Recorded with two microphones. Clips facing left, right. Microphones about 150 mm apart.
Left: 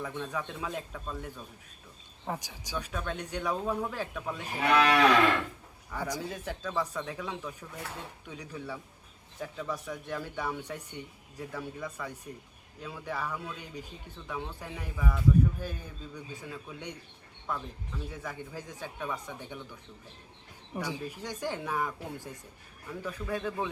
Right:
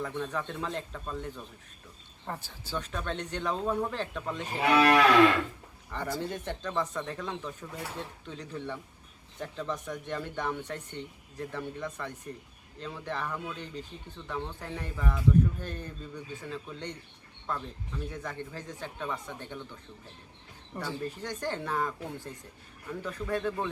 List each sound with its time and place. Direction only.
0.0 s speech: 5° left (ahead or behind)
4.7 s speech: 5° right (ahead or behind)
5.9 s speech: 5° left (ahead or behind)